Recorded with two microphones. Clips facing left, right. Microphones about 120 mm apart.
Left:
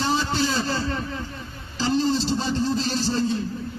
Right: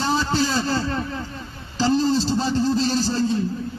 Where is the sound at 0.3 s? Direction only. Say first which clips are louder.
Right 2 dB; 35° right (ahead or behind).